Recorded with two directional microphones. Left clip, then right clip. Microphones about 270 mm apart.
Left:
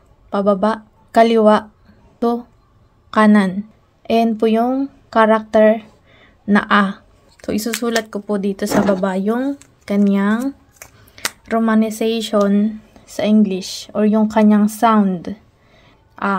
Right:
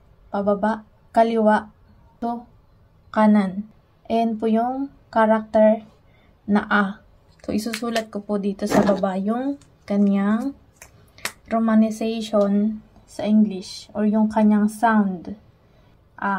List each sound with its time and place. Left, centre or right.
0.3 s a woman's voice: left
7.4 s a woman's voice: left